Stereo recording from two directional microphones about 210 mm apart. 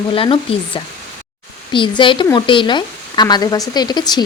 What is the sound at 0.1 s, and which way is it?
Speech, 25° left (ahead or behind).